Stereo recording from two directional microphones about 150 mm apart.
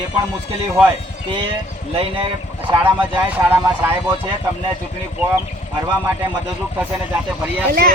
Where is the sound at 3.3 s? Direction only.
15° right (ahead or behind).